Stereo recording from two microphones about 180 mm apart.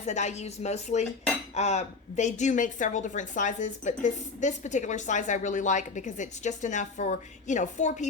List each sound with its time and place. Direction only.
0.0 s a woman's voice: 40° left (ahead or behind)